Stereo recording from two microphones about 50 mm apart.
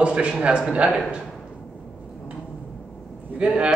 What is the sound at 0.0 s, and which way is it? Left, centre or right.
Speech, right.